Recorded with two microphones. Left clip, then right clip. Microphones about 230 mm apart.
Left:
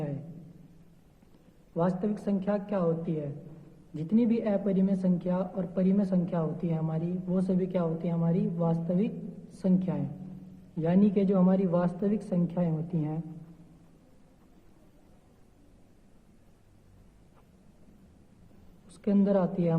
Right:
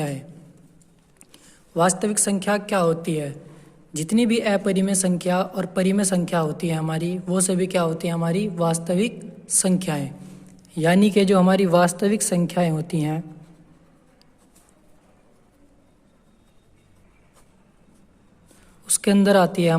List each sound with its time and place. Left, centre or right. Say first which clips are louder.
1.7 s speech: right 10 dB; right
3.9 s speech: right 7 dB; right
19.0 s speech: right 10 dB; right